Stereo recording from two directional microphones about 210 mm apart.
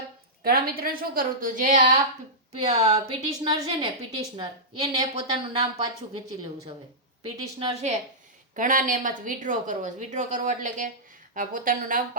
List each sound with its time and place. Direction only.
0.4 s a woman's voice: 45° right (ahead or behind)
2.5 s a woman's voice: 30° right (ahead or behind)
7.2 s a woman's voice: 30° right (ahead or behind)